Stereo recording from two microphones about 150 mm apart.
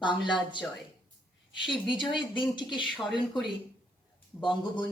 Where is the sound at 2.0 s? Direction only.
30° left (ahead or behind).